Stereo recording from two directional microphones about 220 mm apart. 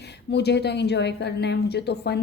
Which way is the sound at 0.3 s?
50° left (ahead or behind).